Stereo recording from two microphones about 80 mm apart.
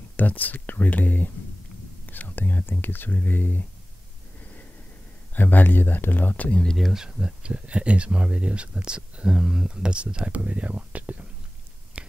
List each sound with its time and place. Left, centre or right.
0.2 s speech: left
5.3 s speech: left
6.6 s speech: centre
6.9 s speech: centre
11.9 s a sound: centre